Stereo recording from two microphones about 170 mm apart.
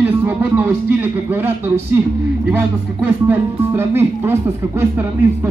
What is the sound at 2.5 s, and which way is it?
Speech, 10° right (ahead or behind).